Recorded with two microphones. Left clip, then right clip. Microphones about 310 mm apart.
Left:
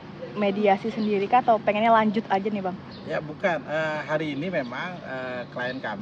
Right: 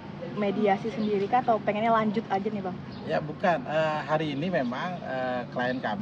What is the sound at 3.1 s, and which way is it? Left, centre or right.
Speech, centre.